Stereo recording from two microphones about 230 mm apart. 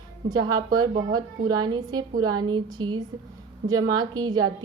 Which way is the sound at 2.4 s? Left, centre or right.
Centre.